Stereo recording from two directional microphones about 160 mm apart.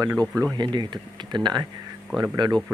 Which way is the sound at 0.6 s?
30° right (ahead or behind).